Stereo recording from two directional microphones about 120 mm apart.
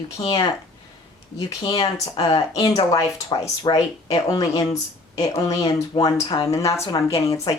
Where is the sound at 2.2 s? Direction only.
40° left (ahead or behind).